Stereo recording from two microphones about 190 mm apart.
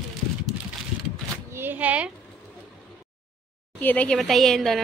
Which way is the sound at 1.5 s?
10° right (ahead or behind).